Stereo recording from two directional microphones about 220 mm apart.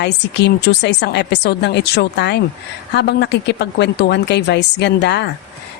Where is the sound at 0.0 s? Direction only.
50° left (ahead or behind).